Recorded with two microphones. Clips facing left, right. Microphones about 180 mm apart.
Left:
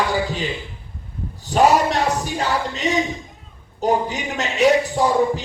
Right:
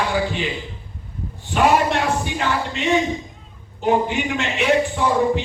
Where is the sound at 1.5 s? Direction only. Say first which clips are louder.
Left 1 dB; 40° left (ahead or behind).